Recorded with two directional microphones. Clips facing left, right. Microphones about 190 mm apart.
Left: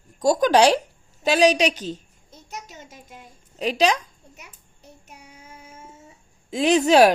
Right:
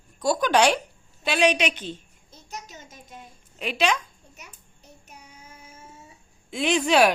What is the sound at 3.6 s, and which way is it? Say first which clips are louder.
Speech: left 4 dB; 35° left (ahead or behind).